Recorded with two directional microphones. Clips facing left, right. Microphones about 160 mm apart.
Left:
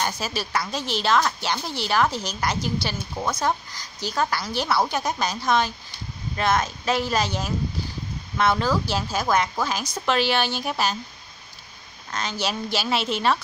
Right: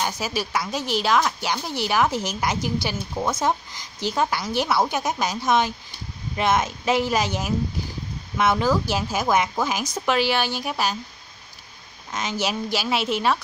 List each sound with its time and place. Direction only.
0.0 s a woman's voice: 10° right (ahead or behind)
12.1 s a woman's voice: 20° right (ahead or behind)